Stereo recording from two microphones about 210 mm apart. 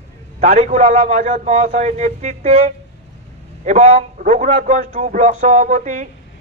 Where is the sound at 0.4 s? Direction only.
35° right (ahead or behind).